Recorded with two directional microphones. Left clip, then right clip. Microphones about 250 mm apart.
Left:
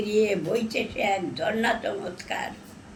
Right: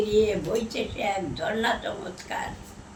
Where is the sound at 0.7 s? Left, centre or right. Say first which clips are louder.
Left 2 dB; centre.